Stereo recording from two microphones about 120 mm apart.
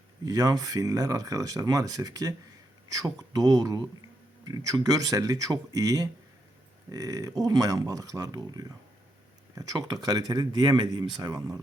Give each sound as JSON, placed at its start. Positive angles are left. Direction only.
{"t": 0.3, "sound": "speech", "side_deg": -30}